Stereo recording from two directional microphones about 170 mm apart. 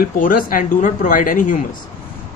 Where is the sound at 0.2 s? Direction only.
55° left (ahead or behind).